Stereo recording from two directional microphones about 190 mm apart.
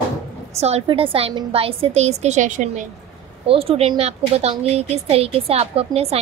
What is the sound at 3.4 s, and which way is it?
A child's voice, 30° right (ahead or behind).